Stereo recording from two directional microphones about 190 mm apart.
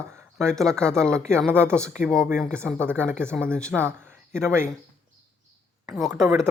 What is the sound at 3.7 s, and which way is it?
Speech, 10° right (ahead or behind).